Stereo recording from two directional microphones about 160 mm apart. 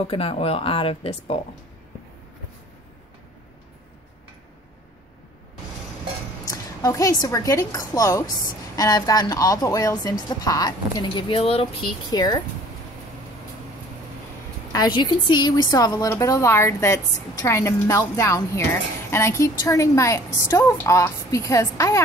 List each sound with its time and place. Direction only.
0.0 s speech: 35° left (ahead or behind)
6.4 s a woman's voice: 20° left (ahead or behind); by 11.9 s 35° left (ahead or behind)
12.1 s a woman's voice: 25° left (ahead or behind)
14.7 s a woman's voice: 25° left (ahead or behind)